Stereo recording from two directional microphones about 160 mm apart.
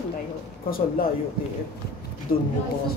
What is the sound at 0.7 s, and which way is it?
Speech, 65° left (ahead or behind).